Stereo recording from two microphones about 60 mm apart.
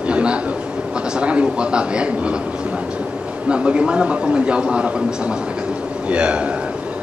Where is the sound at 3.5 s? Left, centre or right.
Centre.